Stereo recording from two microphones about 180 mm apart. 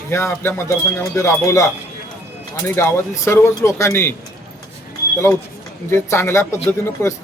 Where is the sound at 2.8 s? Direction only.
15° left (ahead or behind).